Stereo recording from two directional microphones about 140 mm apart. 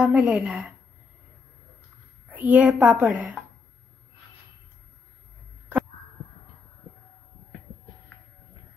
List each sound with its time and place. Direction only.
0.0 s a woman's voice: 10° right (ahead or behind)
2.3 s a woman's voice: 10° right (ahead or behind)